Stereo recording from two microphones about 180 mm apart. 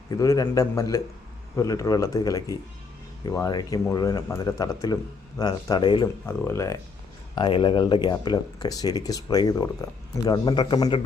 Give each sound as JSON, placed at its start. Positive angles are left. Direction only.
{"t": 0.1, "sound": "speech", "side_deg": 20}
{"t": 6.2, "sound": "speech", "side_deg": 15}
{"t": 7.3, "sound": "speech", "side_deg": 25}